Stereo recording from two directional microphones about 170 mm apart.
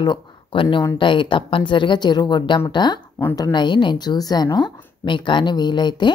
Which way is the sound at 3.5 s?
25° left (ahead or behind).